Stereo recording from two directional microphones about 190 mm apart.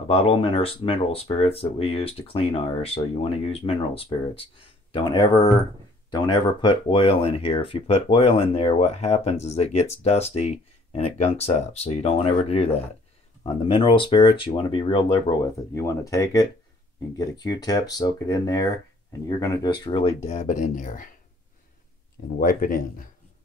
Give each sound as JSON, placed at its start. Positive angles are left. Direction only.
{"t": 0.1, "sound": "speech", "side_deg": 30}
{"t": 15.7, "sound": "speech", "side_deg": 15}
{"t": 22.4, "sound": "speech", "side_deg": 45}